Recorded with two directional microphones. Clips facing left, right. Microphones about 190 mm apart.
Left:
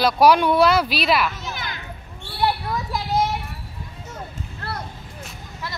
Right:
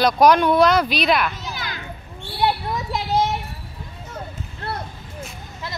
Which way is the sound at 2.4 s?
20° right (ahead or behind).